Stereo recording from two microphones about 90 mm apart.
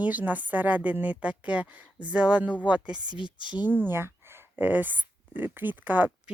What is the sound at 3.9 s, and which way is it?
Speech, 25° right (ahead or behind).